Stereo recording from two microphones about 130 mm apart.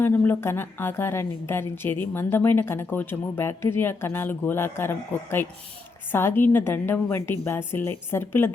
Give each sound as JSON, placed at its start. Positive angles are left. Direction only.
{"t": 0.0, "sound": "a woman's voice", "side_deg": 15}